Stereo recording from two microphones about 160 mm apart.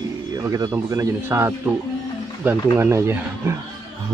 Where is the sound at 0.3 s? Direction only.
20° right (ahead or behind).